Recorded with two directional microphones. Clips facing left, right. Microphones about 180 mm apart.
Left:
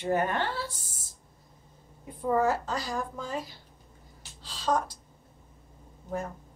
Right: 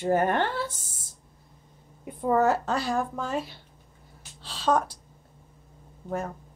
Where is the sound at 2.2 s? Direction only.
65° right (ahead or behind).